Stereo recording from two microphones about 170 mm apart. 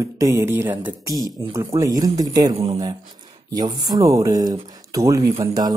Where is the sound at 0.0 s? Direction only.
20° right (ahead or behind).